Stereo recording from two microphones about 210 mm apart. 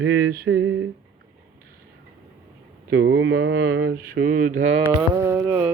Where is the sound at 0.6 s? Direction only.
70° right (ahead or behind).